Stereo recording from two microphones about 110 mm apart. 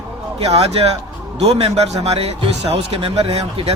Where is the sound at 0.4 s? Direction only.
70° right (ahead or behind).